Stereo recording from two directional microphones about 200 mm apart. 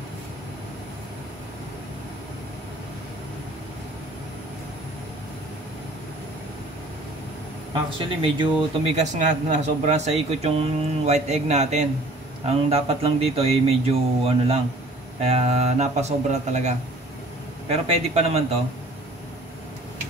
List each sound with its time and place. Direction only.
7.7 s speech: 25° right (ahead or behind)